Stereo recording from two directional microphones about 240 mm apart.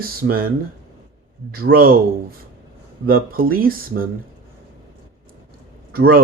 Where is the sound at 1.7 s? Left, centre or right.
Right.